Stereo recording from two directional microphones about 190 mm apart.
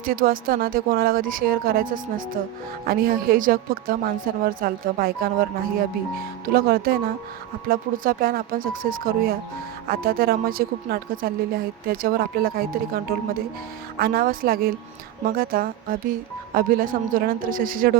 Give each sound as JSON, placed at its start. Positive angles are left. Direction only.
{"t": 0.0, "sound": "a woman's voice", "side_deg": -50}
{"t": 8.0, "sound": "a woman's voice", "side_deg": -50}